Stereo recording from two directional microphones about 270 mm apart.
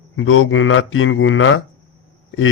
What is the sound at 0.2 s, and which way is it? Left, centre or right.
Speech, left.